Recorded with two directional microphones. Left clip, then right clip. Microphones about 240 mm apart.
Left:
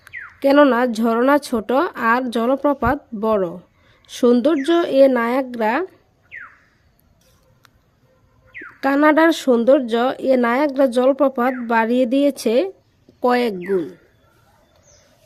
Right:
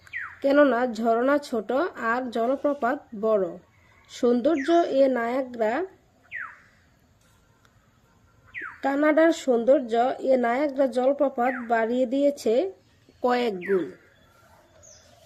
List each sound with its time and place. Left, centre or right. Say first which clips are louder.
0.0 s speech: left 7 dB; left
8.8 s speech: left 6 dB; left